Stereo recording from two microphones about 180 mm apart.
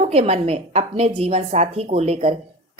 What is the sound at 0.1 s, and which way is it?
A woman's voice, 35° right (ahead or behind).